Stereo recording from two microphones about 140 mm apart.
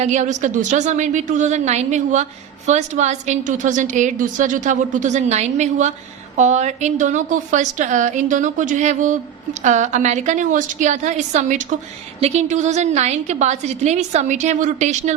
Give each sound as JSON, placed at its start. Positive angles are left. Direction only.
{"t": 0.0, "sound": "a woman's voice", "side_deg": -55}